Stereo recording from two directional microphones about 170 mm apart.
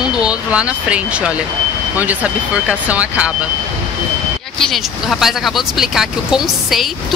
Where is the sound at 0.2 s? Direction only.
5° right (ahead or behind).